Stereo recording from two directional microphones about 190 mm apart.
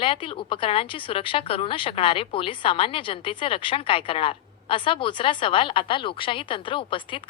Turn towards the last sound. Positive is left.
turn(degrees=25)  # may be behind; listen again after turning